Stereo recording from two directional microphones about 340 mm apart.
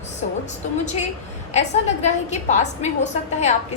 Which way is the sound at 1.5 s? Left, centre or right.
Centre.